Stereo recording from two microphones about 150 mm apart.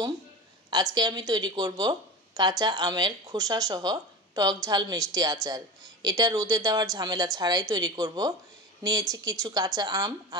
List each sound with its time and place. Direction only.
0.7 s speech: 30° right (ahead or behind)